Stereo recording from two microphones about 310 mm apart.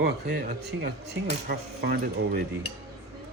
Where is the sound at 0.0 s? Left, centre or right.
Right.